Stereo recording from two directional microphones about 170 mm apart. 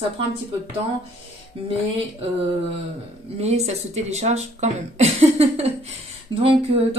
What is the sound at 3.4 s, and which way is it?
Speech, 40° right (ahead or behind).